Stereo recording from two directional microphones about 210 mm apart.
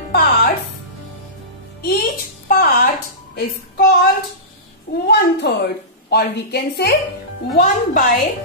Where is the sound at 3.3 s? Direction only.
45° left (ahead or behind).